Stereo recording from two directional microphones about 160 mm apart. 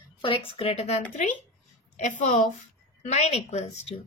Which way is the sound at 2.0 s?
50° left (ahead or behind).